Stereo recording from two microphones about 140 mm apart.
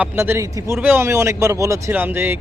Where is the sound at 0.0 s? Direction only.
15° right (ahead or behind).